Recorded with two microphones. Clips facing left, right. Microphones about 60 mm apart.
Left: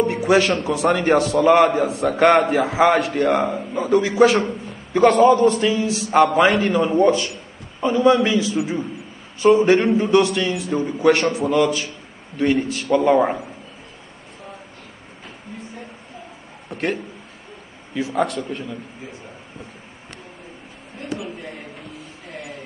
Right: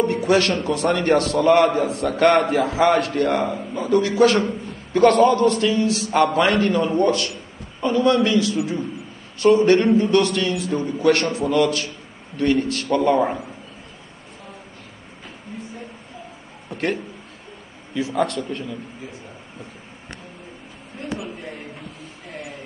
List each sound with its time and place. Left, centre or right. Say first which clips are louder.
0.0 s a man's voice: left 1 dB; centre
13.2 s a man's voice: left 2 dB; left
16.6 s a sound: even; centre
17.9 s a man's voice: even; centre